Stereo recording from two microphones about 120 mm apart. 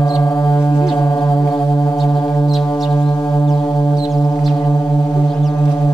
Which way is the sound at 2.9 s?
40° left (ahead or behind).